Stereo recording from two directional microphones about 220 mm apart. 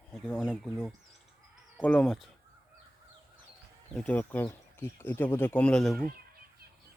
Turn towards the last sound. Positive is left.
turn(degrees=5)  # may be behind; listen again after turning